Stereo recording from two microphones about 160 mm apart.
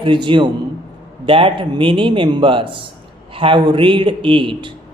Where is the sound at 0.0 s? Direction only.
30° right (ahead or behind).